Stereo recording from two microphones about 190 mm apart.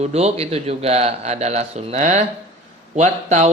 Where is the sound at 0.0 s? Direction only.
35° right (ahead or behind).